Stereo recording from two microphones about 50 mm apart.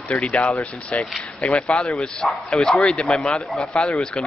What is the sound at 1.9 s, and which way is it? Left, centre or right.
Speech, centre.